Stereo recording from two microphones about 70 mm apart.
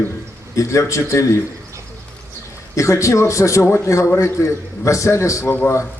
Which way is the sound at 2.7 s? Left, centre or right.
Left.